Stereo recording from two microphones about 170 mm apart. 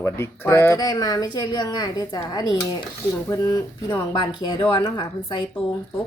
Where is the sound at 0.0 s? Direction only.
15° left (ahead or behind).